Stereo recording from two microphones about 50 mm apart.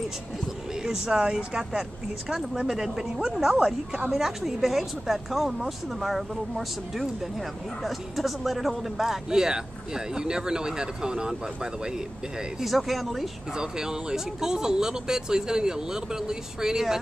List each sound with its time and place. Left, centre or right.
0.8 s speech: centre
1.6 s speech: centre
4.1 s speech: centre
12.6 s speech: centre
13.6 s speech: centre